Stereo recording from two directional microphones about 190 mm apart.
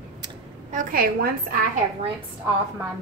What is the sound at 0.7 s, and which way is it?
Speech, 45° right (ahead or behind).